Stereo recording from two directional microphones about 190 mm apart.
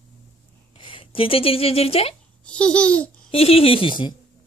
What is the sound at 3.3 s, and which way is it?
Speech, 30° left (ahead or behind).